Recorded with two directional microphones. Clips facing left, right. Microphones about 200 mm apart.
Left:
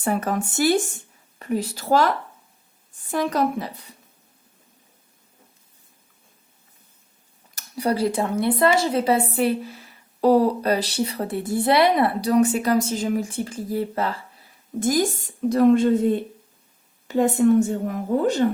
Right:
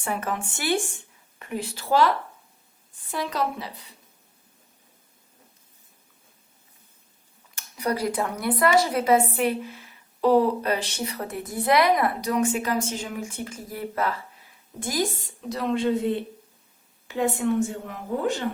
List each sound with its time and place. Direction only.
0.0 s a woman's voice: 40° left (ahead or behind)
3.1 s a woman's voice: 45° left (ahead or behind)
7.5 s a woman's voice: 30° left (ahead or behind)
14.8 s a woman's voice: 45° left (ahead or behind)